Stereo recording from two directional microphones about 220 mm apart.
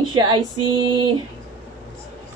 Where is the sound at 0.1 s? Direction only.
20° right (ahead or behind).